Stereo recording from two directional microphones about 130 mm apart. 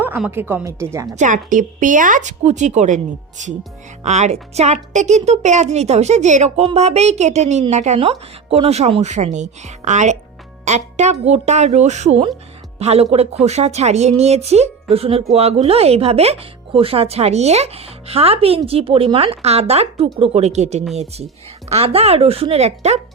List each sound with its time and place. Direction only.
0.3 s speech: 15° right (ahead or behind)
1.1 s a woman's voice: 70° right (ahead or behind)
7.9 s a woman's voice: 45° right (ahead or behind)